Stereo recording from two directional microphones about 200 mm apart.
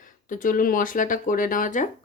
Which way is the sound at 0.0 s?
40° left (ahead or behind).